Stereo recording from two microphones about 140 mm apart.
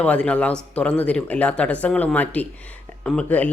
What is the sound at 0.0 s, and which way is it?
Speech, 10° left (ahead or behind).